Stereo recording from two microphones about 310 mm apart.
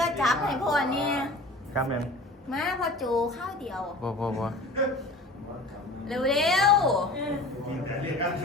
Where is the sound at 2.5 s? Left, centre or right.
Centre.